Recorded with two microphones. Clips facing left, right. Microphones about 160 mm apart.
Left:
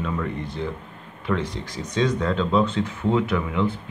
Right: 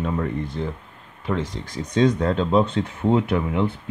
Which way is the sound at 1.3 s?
35° right (ahead or behind).